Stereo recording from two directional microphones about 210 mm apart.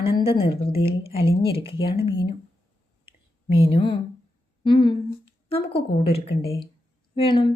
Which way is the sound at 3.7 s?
25° left (ahead or behind).